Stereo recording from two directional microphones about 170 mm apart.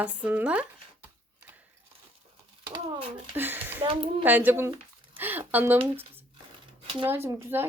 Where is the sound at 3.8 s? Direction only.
30° right (ahead or behind).